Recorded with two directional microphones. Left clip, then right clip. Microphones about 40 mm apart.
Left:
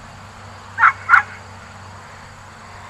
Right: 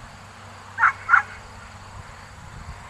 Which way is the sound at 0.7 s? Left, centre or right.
Centre.